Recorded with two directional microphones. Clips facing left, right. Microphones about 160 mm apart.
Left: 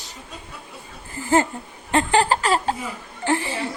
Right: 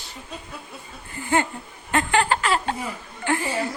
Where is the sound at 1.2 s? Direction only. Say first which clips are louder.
Left 4 dB; 35° left (ahead or behind).